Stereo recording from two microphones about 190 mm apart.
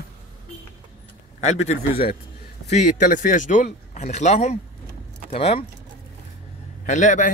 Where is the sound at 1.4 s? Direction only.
35° left (ahead or behind).